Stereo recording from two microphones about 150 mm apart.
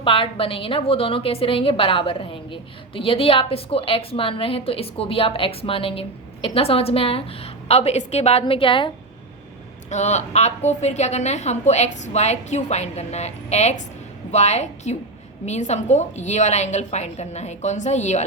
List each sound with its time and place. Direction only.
0.0 s a woman's voice: 35° left (ahead or behind)
9.9 s a woman's voice: 50° left (ahead or behind)